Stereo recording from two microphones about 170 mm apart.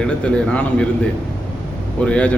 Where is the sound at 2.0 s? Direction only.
5° left (ahead or behind).